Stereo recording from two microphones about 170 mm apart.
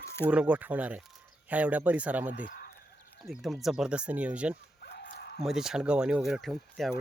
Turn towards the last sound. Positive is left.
turn(degrees=0)  # may be behind; listen again after turning